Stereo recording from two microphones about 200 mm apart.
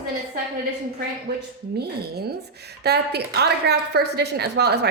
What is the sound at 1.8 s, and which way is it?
A woman's voice, 55° right (ahead or behind).